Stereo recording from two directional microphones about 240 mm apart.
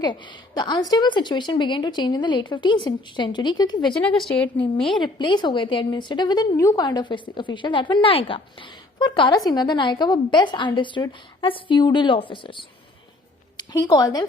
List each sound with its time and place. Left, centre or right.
0.0 s a woman's voice: centre
3.8 s a woman's voice: centre
4.9 s a woman's voice: centre